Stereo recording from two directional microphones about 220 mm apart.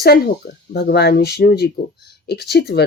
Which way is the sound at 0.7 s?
45° left (ahead or behind).